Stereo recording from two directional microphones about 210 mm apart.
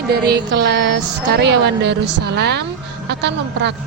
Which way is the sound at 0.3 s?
50° right (ahead or behind).